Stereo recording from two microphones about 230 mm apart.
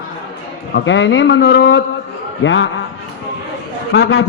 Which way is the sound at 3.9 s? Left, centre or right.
Left.